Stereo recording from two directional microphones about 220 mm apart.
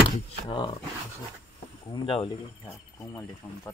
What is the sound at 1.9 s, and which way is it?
Speech, 25° left (ahead or behind).